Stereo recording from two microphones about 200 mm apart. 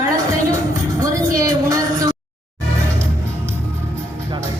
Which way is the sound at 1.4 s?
15° right (ahead or behind).